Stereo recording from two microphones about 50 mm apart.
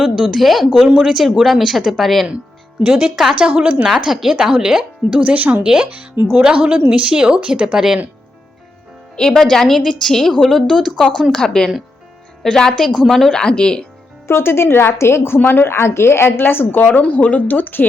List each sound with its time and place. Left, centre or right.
0.0 s speech: centre
3.3 s speech: right
3.9 s speech: centre
5.2 s speech: right
6.6 s speech: right
7.0 s speech: centre
9.1 s a woman's voice: centre
13.4 s a woman's voice: centre
14.3 s a woman's voice: left
15.4 s a woman's voice: left
16.4 s a woman's voice: left
16.8 s speech: left